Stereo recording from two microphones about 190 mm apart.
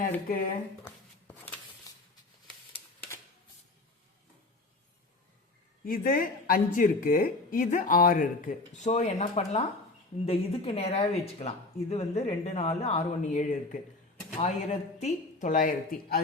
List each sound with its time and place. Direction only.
0.0 s speech: 50° left (ahead or behind)
5.8 s speech: 50° left (ahead or behind); by 9.6 s 35° left (ahead or behind)
10.8 s speech: 30° left (ahead or behind); by 16.2 s 50° left (ahead or behind)